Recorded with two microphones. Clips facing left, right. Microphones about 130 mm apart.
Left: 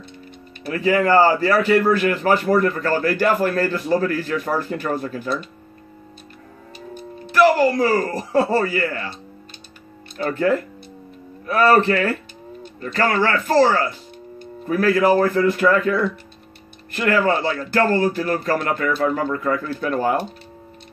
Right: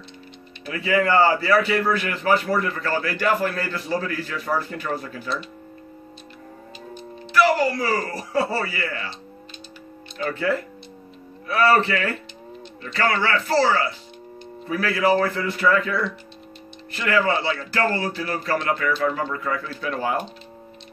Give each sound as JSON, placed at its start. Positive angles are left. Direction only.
{"t": 0.7, "sound": "a man's voice", "side_deg": 40}
{"t": 6.9, "sound": "speech", "side_deg": 45}
{"t": 10.1, "sound": "a man's voice", "side_deg": 40}